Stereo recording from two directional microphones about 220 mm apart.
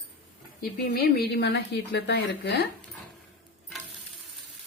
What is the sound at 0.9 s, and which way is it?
A woman's voice, 45° left (ahead or behind).